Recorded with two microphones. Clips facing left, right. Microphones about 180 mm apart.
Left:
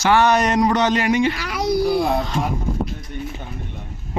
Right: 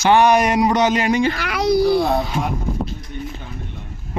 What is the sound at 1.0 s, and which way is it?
Speech, 35° right (ahead or behind).